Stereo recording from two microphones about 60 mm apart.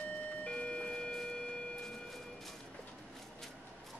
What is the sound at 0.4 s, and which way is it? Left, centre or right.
Doorbell, centre.